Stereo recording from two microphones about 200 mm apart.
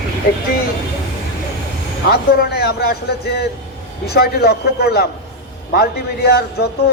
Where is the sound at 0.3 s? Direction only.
50° left (ahead or behind).